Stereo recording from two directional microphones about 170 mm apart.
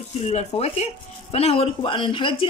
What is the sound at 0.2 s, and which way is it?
Speech, 40° left (ahead or behind).